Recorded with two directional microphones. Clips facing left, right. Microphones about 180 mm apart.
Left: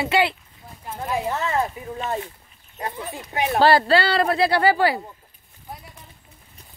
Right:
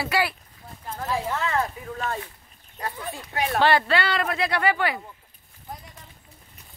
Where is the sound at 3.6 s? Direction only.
35° left (ahead or behind).